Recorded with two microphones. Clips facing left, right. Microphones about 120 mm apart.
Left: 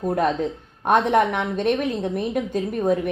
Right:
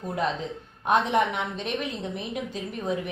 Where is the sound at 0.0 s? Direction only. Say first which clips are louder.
Left 7 dB; 45° left (ahead or behind).